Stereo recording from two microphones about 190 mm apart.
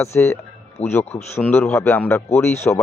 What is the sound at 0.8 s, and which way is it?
Speech, 35° left (ahead or behind).